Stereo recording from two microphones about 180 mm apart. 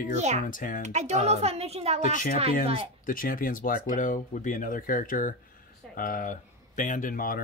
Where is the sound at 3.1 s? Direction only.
50° left (ahead or behind).